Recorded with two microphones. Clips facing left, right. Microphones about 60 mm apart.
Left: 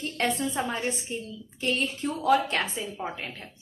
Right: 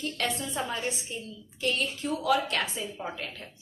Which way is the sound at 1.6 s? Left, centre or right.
Left.